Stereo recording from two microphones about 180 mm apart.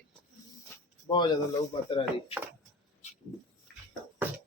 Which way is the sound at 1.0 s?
25° left (ahead or behind).